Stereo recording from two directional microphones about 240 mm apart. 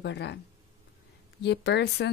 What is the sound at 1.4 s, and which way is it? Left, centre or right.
Speech, left.